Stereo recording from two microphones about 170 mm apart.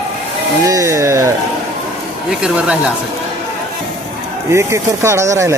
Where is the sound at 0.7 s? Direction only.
20° right (ahead or behind).